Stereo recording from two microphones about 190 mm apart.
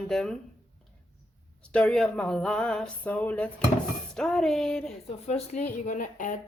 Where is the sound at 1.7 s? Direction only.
5° left (ahead or behind).